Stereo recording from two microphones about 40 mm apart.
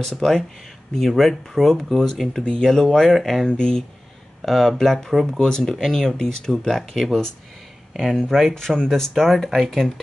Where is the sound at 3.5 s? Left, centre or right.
Centre.